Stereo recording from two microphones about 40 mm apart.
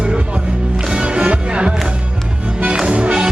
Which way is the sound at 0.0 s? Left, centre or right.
Right.